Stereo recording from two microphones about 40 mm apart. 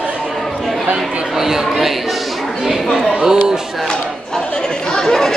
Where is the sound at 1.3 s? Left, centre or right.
Centre.